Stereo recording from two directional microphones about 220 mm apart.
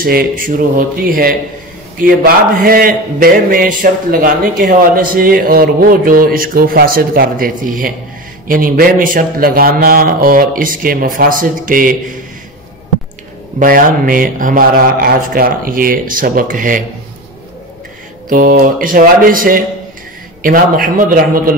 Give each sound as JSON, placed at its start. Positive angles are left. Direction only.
{"t": 0.0, "sound": "a man's voice", "side_deg": -40}
{"t": 13.6, "sound": "a man's voice", "side_deg": -40}
{"t": 18.3, "sound": "a man's voice", "side_deg": -40}